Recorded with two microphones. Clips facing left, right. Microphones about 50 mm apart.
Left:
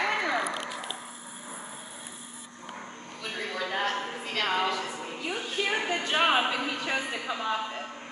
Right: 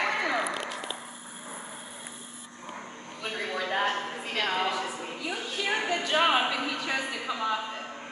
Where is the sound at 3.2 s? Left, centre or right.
Centre.